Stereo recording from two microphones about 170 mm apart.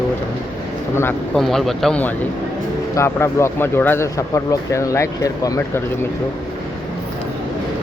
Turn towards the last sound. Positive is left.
turn(degrees=20)  # may be behind; listen again after turning